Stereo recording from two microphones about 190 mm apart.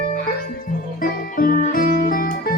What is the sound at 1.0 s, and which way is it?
Music, 50° left (ahead or behind).